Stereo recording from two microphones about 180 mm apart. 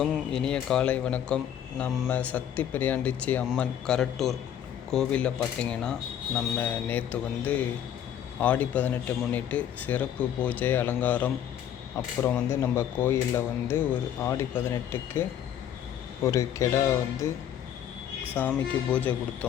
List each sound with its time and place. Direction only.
0.0 s a man's voice: 5° left (ahead or behind)
18.3 s speech: 10° left (ahead or behind)